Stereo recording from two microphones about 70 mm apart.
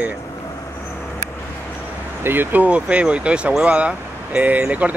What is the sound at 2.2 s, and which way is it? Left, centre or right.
Speech, right.